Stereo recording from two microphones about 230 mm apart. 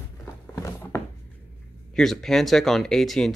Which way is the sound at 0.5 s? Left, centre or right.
Centre.